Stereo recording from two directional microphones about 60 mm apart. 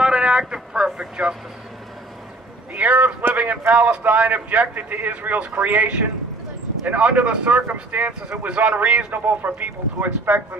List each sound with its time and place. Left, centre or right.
0.0 s speech: centre
2.7 s a man's voice: right